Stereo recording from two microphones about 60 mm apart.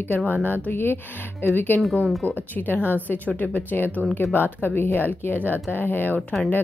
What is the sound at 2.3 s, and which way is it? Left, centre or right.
A woman's voice, left.